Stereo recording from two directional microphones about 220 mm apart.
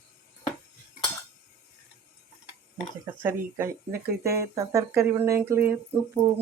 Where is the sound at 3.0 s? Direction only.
10° right (ahead or behind).